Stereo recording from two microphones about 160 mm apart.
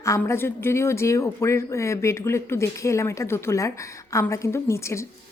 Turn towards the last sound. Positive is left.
turn(degrees=15)  # may be behind; listen again after turning